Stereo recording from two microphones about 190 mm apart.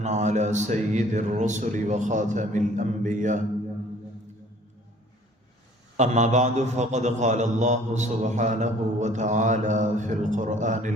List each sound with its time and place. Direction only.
0.0 s a man's voice: 40° right (ahead or behind)
6.0 s a man's voice: 40° right (ahead or behind)